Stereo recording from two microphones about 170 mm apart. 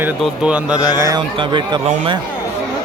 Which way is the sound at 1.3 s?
30° right (ahead or behind).